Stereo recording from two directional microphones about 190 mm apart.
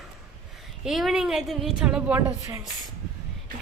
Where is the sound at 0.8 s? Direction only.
Centre (ahead or behind).